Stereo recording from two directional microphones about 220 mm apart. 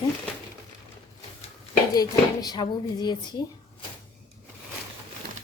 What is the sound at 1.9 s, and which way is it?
A woman's voice, 15° left (ahead or behind).